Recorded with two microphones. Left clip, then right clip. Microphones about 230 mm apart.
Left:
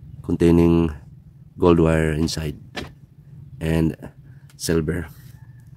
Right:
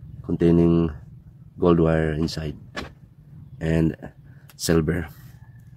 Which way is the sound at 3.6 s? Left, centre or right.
Centre.